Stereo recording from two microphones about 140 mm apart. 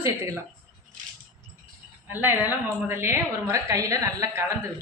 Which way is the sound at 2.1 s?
15° right (ahead or behind).